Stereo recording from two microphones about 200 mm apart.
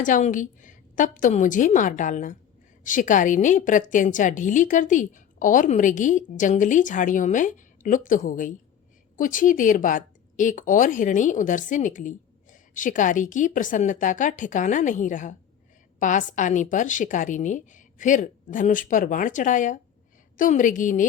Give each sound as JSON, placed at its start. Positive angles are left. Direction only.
{"t": 0.0, "sound": "speech", "side_deg": 40}